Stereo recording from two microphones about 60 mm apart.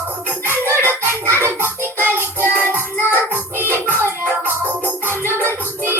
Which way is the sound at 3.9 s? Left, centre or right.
Left.